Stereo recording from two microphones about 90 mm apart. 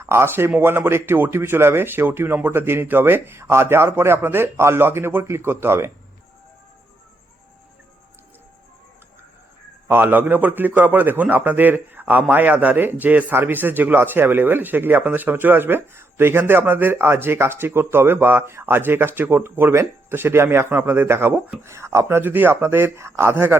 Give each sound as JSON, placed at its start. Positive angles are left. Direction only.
{"t": 0.0, "sound": "speech", "side_deg": -30}
{"t": 9.9, "sound": "speech", "side_deg": -20}